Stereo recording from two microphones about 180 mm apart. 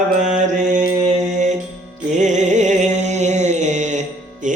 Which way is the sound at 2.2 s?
40° right (ahead or behind).